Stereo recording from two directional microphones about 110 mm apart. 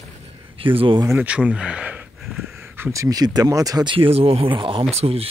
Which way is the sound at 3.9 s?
60° right (ahead or behind).